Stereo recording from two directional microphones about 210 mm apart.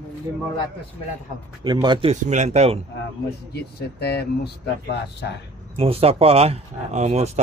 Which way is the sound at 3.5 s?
50° left (ahead or behind).